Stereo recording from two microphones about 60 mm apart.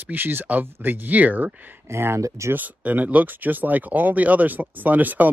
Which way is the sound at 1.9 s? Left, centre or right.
Right.